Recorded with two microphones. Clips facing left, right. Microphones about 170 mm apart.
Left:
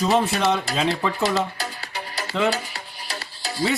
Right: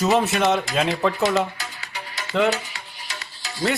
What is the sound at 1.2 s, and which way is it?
Music, 35° left (ahead or behind).